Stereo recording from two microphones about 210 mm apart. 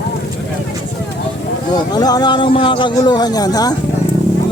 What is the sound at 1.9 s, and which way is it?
Speech, 20° left (ahead or behind).